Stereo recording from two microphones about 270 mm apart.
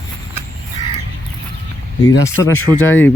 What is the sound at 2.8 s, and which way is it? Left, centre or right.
Speech, left.